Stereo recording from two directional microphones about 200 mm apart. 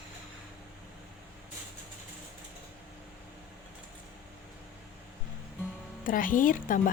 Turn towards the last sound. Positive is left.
turn(degrees=40)  # may be behind; listen again after turning